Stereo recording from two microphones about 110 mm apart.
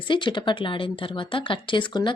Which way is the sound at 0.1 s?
45° left (ahead or behind).